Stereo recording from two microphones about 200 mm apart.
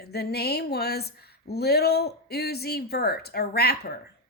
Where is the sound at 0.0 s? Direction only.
55° left (ahead or behind).